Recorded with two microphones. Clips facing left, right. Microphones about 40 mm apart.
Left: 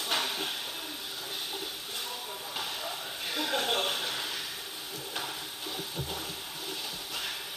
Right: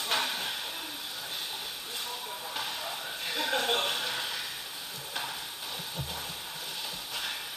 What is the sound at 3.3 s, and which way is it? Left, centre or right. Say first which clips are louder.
Music: right 1 dB; right.